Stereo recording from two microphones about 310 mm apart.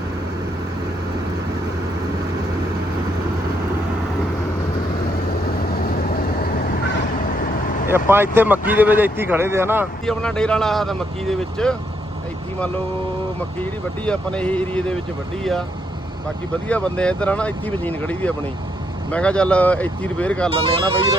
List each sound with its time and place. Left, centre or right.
7.9 s vehicle: centre
8.4 s speech: centre
14.0 s speech: centre
16.6 s speech: centre
20.5 s speech: centre